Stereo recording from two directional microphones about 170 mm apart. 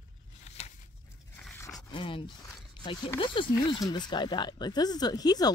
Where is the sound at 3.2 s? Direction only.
30° left (ahead or behind).